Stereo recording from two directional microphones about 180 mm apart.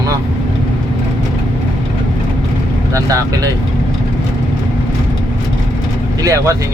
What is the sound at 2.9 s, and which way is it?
Speech, 20° right (ahead or behind).